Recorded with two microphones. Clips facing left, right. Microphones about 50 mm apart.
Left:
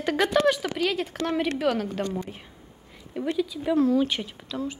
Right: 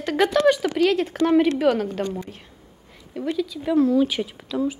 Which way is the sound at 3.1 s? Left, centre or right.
Centre.